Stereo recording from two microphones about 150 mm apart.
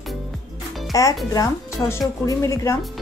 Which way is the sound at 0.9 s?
20° left (ahead or behind).